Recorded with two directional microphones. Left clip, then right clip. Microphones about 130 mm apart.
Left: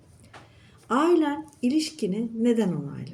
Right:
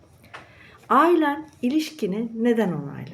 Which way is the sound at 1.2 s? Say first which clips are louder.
Right 3 dB; 25° left (ahead or behind).